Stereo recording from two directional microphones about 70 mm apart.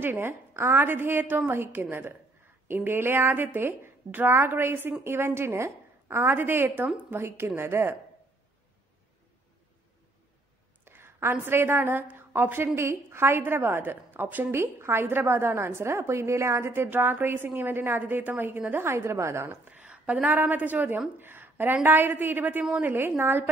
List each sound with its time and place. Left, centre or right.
0.0 s a woman's voice: right
10.9 s a woman's voice: right
12.7 s a woman's voice: right
19.7 s a sound: centre
20.2 s a woman's voice: right
21.2 s a sound: right
21.8 s a woman's voice: right